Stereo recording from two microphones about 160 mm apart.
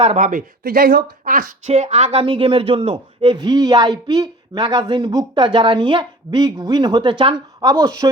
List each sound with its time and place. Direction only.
0.0 s speech: 40° right (ahead or behind)
0.3 s speech: 60° right (ahead or behind)
1.6 s a man's voice: 40° right (ahead or behind); by 8.1 s 25° right (ahead or behind)